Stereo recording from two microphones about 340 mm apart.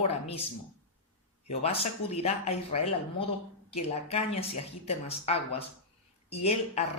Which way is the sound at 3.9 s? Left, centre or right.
Centre.